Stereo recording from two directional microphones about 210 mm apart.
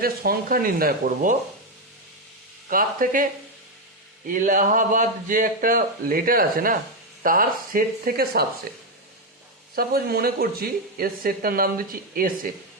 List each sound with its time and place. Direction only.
0.0 s speech: 45° right (ahead or behind)
2.6 s speech: 40° right (ahead or behind)
4.3 s speech: 40° right (ahead or behind)
9.7 s speech: 45° right (ahead or behind)